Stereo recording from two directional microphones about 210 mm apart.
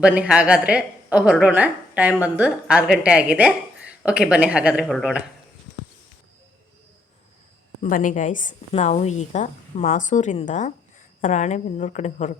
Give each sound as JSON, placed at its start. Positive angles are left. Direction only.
{"t": 0.0, "sound": "a woman's voice", "side_deg": -5}
{"t": 7.8, "sound": "a woman's voice", "side_deg": 40}